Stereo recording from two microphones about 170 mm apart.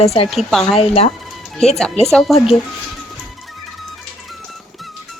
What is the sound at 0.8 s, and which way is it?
Speech, 35° left (ahead or behind).